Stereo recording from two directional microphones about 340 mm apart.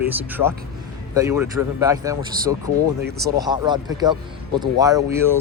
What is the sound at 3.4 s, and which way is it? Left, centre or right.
Speech, centre.